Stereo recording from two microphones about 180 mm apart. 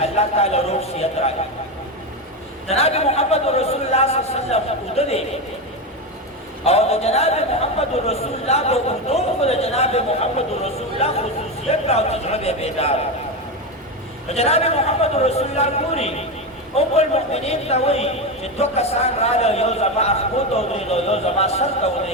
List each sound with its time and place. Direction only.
0.0 s a man's voice: 35° left (ahead or behind)
2.6 s a man's voice: 35° left (ahead or behind)
6.7 s a man's voice: 35° left (ahead or behind)
14.3 s a man's voice: 35° left (ahead or behind)